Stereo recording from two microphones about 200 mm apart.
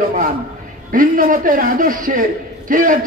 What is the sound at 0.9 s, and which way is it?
A man's voice, 45° right (ahead or behind).